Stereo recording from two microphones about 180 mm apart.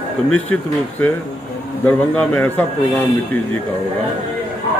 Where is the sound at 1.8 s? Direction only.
10° left (ahead or behind).